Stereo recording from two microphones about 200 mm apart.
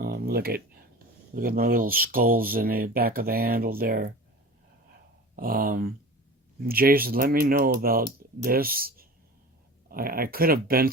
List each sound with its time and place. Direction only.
0.0 s speech: 50° right (ahead or behind)
5.4 s speech: 45° right (ahead or behind)